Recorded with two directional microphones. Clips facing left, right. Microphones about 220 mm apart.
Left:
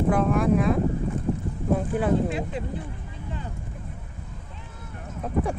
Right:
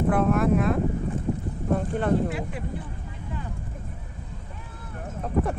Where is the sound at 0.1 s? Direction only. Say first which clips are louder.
Even; centre (ahead or behind).